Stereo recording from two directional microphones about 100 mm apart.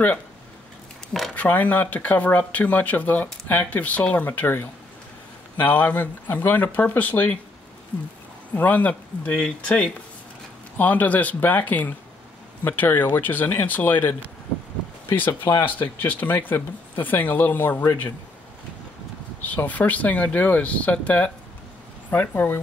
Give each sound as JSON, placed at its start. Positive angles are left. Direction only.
{"t": 1.3, "sound": "speech", "side_deg": 15}
{"t": 8.5, "sound": "speech", "side_deg": 15}
{"t": 19.4, "sound": "speech", "side_deg": 15}